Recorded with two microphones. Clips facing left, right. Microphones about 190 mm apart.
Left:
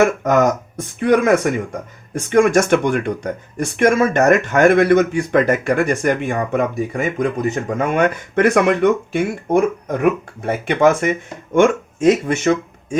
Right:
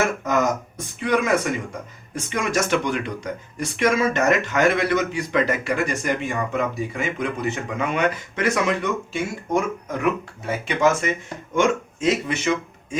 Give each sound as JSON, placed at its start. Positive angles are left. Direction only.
{"t": 0.9, "sound": "speech", "side_deg": 55}